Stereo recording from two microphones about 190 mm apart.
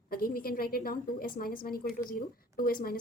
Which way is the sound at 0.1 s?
50° left (ahead or behind).